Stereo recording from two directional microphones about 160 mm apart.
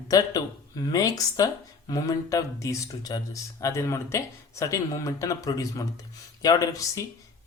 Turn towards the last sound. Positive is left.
turn(degrees=20)  # may be behind; listen again after turning